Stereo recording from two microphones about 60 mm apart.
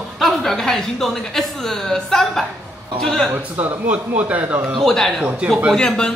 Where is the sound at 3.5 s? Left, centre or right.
Right.